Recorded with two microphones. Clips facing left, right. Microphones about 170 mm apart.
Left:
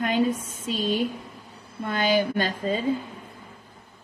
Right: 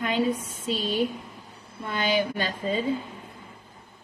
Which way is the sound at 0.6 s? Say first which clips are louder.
Left 2 dB; 50° left (ahead or behind).